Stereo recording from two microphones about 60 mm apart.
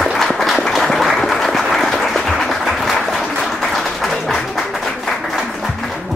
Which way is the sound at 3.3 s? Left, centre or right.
Centre.